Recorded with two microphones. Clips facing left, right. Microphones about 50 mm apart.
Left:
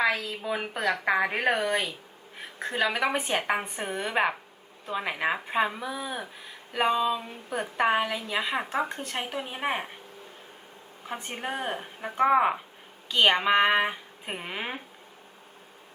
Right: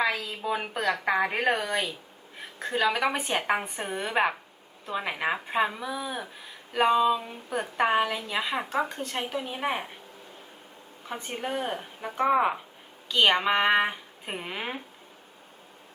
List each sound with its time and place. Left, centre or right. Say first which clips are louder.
0.3 s a woman's voice: right 1 dB; centre
2.6 s a woman's voice: right 1 dB; centre
8.9 s speech: right 1 dB; left
9.2 s speech: right 1 dB; centre
11.3 s speech: right 2 dB; centre